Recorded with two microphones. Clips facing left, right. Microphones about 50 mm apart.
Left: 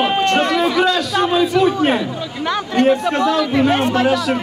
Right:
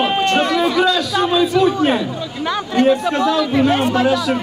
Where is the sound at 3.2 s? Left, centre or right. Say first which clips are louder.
Even; left.